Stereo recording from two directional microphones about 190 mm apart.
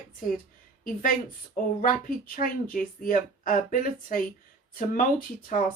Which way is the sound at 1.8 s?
45° left (ahead or behind).